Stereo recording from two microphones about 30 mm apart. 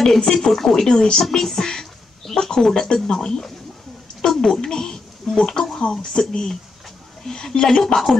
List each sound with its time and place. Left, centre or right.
0.0 s speech: centre
1.2 s music: centre
2.3 s speech: centre
4.6 s speech: left